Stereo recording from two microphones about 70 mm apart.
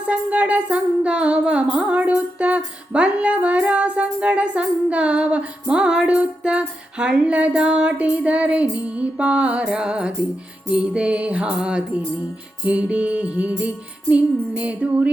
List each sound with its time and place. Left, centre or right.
0.1 s music: centre